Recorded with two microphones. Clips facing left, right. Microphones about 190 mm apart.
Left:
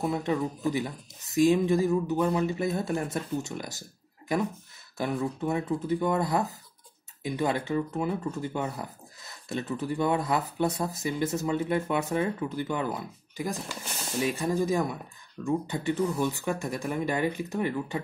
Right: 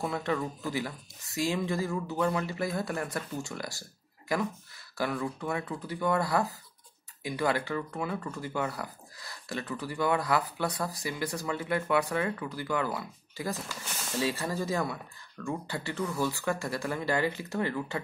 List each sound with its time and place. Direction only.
0.0 s speech: 20° left (ahead or behind)
4.9 s speech: 20° left (ahead or behind)